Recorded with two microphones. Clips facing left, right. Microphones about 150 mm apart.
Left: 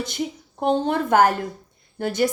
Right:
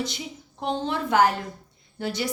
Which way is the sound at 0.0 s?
50° left (ahead or behind).